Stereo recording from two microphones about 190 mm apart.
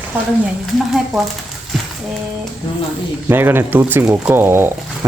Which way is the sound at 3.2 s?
10° right (ahead or behind).